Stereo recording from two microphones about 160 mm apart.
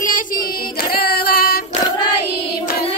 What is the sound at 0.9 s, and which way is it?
Music, 70° left (ahead or behind).